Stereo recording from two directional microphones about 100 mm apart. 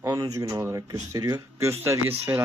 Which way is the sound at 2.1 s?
20° right (ahead or behind).